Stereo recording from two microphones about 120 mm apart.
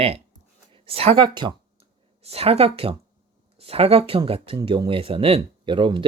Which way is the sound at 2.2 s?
55° right (ahead or behind).